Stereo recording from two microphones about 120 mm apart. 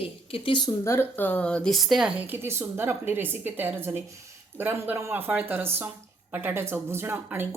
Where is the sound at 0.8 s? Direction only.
20° left (ahead or behind); by 2.2 s 5° right (ahead or behind).